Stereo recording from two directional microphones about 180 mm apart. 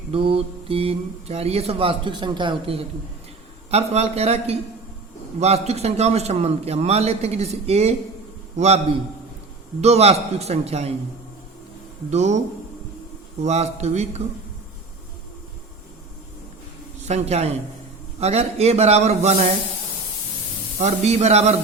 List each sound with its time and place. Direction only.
0.1 s a man's voice: 30° right (ahead or behind)
9.8 s speech: 35° right (ahead or behind)
12.1 s speech: 40° right (ahead or behind)
13.4 s speech: 40° right (ahead or behind)
17.1 s speech: 40° right (ahead or behind)
20.7 s speech: 35° right (ahead or behind)